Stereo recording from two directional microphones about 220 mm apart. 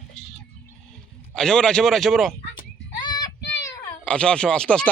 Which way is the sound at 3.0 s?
20° left (ahead or behind).